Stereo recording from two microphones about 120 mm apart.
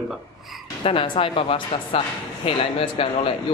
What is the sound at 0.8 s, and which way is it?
Speech, 50° left (ahead or behind).